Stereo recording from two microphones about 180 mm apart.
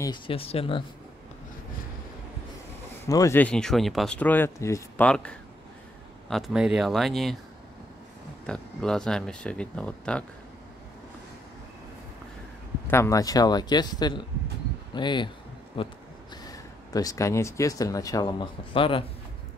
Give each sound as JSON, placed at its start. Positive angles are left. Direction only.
{"t": 0.0, "sound": "speech", "side_deg": 30}
{"t": 3.1, "sound": "speech", "side_deg": 15}
{"t": 8.5, "sound": "speech", "side_deg": 5}
{"t": 12.8, "sound": "speech", "side_deg": 15}